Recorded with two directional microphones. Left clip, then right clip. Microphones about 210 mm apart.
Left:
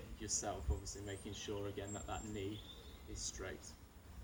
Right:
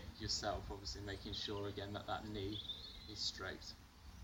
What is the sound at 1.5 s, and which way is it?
Speech, centre (ahead or behind).